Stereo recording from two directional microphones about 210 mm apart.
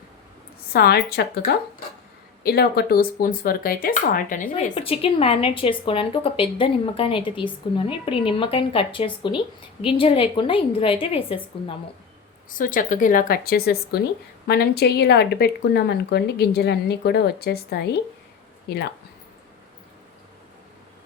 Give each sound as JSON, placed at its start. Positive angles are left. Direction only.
{"t": 0.7, "sound": "speech", "side_deg": 50}
{"t": 4.7, "sound": "a woman's voice", "side_deg": 25}
{"t": 12.5, "sound": "speech", "side_deg": 40}